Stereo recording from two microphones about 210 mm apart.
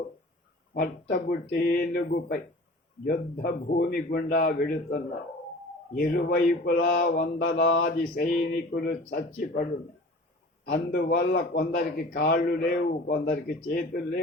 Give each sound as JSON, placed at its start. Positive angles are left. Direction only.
{"t": 0.7, "sound": "a man's voice", "side_deg": 50}
{"t": 7.9, "sound": "a man's voice", "side_deg": 45}
{"t": 10.7, "sound": "a man's voice", "side_deg": 45}